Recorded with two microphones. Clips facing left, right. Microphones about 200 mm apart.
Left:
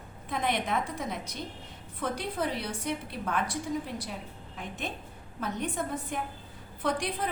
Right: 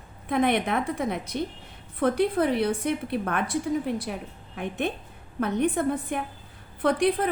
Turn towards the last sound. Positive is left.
turn(degrees=-60)  # may be behind; listen again after turning